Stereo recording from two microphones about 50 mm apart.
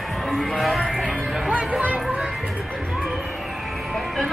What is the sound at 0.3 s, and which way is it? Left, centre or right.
Music, centre.